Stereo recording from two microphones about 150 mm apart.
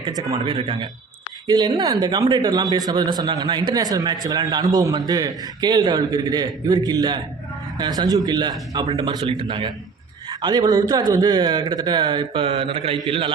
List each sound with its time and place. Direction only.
0.0 s speech: 25° right (ahead or behind)
0.4 s speech: 35° right (ahead or behind)